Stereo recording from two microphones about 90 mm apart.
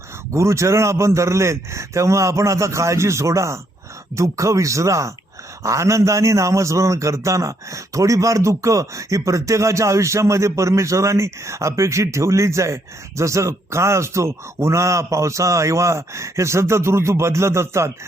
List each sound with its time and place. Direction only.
0.3 s a man's voice: 35° right (ahead or behind)